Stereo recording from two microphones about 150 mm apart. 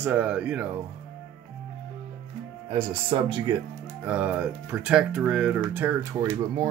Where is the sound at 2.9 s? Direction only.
35° right (ahead or behind).